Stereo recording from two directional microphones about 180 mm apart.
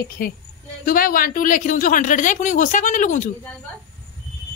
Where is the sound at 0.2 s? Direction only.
50° left (ahead or behind).